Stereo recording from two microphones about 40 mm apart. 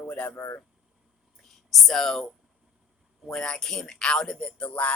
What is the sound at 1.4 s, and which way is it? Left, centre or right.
Speech, centre.